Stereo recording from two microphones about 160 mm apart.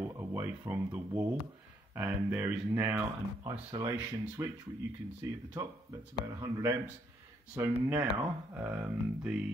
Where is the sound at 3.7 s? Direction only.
20° right (ahead or behind).